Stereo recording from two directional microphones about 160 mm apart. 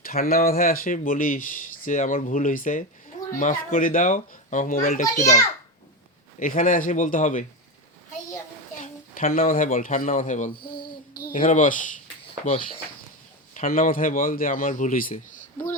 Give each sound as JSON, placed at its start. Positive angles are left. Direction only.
{"t": 0.0, "sound": "speech", "side_deg": 65}
{"t": 6.4, "sound": "speech", "side_deg": 55}
{"t": 8.8, "sound": "speech", "side_deg": 60}
{"t": 11.1, "sound": "speech", "side_deg": 65}
{"t": 13.5, "sound": "speech", "side_deg": 55}